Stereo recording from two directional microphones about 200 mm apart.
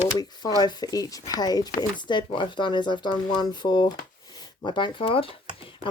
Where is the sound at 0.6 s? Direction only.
20° left (ahead or behind).